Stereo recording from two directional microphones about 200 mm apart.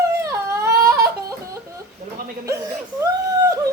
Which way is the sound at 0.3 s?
15° right (ahead or behind).